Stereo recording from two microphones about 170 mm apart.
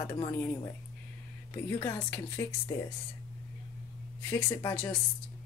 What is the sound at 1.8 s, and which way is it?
Music, 15° left (ahead or behind).